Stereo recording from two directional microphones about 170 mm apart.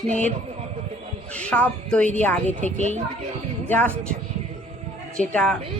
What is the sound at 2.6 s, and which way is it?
Speech, 45° right (ahead or behind).